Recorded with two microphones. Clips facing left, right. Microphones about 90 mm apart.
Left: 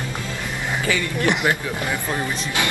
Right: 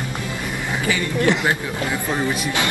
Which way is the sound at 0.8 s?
20° right (ahead or behind).